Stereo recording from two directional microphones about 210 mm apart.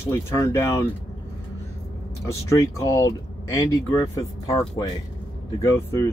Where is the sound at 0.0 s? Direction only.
10° left (ahead or behind).